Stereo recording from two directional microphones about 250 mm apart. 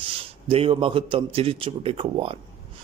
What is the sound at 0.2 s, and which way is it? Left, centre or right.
Speech, right.